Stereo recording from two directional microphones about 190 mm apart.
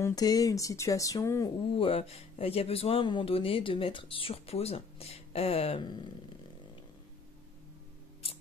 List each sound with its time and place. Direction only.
0.0 s speech: 20° left (ahead or behind)
1.7 s speech: 30° left (ahead or behind)